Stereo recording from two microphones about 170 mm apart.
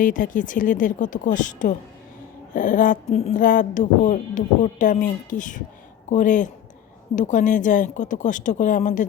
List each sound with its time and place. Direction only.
0.0 s speech: 50° left (ahead or behind)